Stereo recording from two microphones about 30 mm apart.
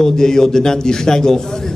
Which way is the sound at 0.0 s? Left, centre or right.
Centre.